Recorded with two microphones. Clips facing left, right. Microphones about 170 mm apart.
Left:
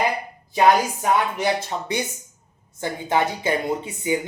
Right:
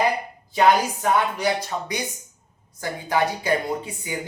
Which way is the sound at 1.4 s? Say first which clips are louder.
Left 1 dB; 25° left (ahead or behind).